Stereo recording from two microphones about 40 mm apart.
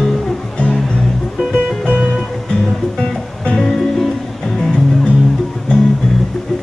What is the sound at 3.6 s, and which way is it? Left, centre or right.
Music, centre.